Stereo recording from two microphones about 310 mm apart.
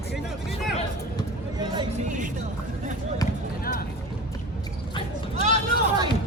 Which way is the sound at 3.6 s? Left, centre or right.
Left.